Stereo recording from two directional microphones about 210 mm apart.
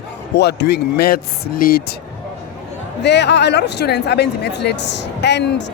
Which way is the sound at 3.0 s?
55° left (ahead or behind).